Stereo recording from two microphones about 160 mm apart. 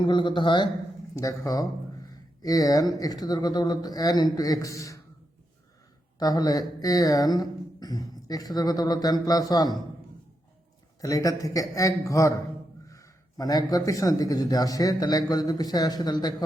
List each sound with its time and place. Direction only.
0.0 s speech: 30° left (ahead or behind)
1.1 s speech: 20° left (ahead or behind)
6.1 s speech: 25° left (ahead or behind)
11.0 s speech: 20° left (ahead or behind)